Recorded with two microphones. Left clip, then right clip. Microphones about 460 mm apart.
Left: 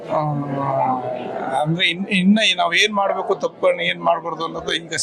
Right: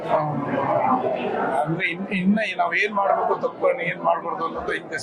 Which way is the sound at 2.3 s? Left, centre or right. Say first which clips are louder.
Left 5 dB; left.